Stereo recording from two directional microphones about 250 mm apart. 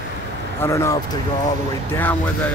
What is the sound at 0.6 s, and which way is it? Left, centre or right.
Speech, centre.